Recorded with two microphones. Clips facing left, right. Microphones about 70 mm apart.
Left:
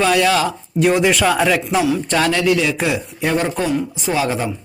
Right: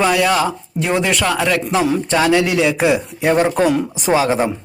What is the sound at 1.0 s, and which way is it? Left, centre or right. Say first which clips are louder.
Speech: left 2 dB; centre.